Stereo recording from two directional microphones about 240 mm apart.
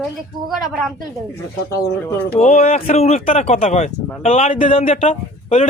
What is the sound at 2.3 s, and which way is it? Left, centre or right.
A man's voice, left.